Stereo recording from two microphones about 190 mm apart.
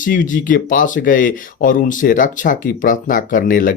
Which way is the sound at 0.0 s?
45° left (ahead or behind).